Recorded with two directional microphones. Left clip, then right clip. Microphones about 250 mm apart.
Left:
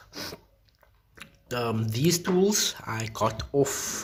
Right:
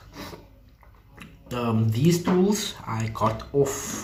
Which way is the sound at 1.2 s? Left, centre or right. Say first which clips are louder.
Even; left.